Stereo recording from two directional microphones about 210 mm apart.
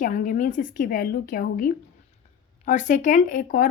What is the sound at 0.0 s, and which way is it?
Speech, 40° left (ahead or behind).